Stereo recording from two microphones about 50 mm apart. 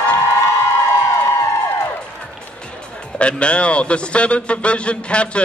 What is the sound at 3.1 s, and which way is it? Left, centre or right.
A man's voice, left.